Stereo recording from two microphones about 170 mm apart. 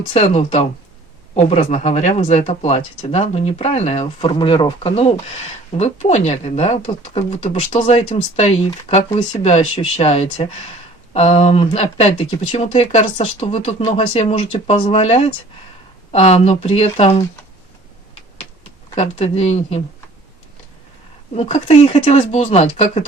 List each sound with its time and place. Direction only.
0.1 s speech: 35° left (ahead or behind)
18.9 s speech: 40° left (ahead or behind)
21.3 s speech: 40° left (ahead or behind)